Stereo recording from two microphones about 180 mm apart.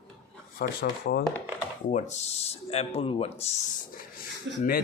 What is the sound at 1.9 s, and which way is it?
Speech, 40° left (ahead or behind).